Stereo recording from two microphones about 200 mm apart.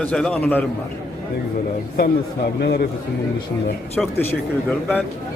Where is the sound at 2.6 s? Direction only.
55° left (ahead or behind).